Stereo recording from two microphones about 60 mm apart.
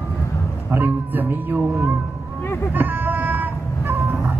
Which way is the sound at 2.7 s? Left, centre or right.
Right.